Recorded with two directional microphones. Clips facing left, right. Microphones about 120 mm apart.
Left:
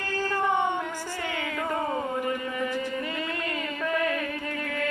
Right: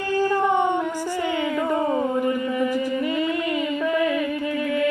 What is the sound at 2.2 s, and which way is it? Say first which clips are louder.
Music: right 7 dB; 10° right (ahead or behind).